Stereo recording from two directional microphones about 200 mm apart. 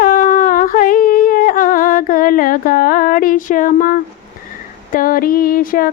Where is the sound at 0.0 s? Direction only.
45° left (ahead or behind).